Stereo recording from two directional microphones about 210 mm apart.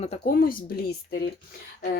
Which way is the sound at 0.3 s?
45° left (ahead or behind).